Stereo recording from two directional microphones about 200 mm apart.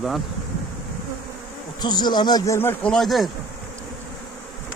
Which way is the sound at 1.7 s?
20° left (ahead or behind).